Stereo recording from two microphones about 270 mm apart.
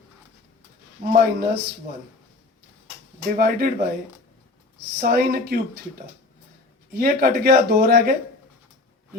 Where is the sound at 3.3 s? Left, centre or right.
Right.